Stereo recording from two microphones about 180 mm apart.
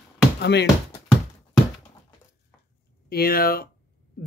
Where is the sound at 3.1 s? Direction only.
55° left (ahead or behind).